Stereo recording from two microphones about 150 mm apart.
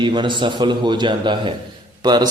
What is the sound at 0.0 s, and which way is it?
A man's voice, 30° right (ahead or behind).